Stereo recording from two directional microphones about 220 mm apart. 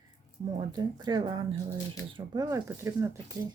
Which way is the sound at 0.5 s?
20° right (ahead or behind).